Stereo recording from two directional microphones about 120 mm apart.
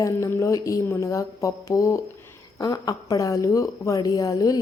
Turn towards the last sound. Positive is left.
turn(degrees=30)  # may be behind; listen again after turning